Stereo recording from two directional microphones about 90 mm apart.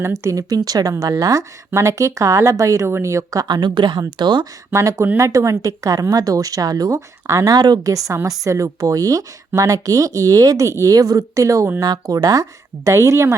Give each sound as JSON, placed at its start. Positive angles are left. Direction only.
{"t": 0.2, "sound": "speech", "side_deg": -40}
{"t": 3.4, "sound": "speech", "side_deg": -55}
{"t": 4.7, "sound": "speech", "side_deg": -35}